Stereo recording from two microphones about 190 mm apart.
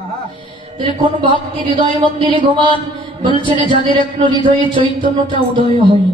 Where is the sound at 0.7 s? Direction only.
25° right (ahead or behind).